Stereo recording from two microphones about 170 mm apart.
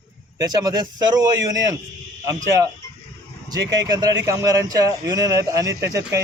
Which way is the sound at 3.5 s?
20° right (ahead or behind).